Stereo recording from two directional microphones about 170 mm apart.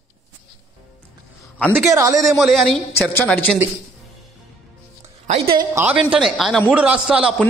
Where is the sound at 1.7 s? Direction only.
15° right (ahead or behind).